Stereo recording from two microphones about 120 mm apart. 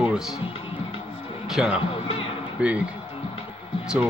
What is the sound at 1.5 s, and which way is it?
A man's voice, 5° right (ahead or behind).